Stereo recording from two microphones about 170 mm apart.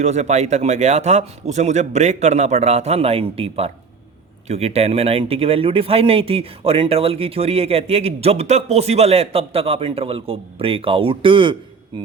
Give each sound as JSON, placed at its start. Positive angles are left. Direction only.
{"t": 0.0, "sound": "speech", "side_deg": -40}